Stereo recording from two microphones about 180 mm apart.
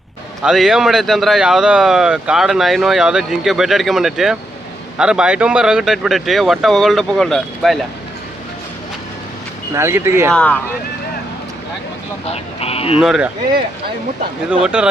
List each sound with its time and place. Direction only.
0.4 s speech: centre (ahead or behind)
9.7 s speech: 15° right (ahead or behind)
10.3 s speech: 5° left (ahead or behind)
12.3 s speech: 35° left (ahead or behind)
13.0 s speech: 5° right (ahead or behind)
14.6 s speech: 5° right (ahead or behind)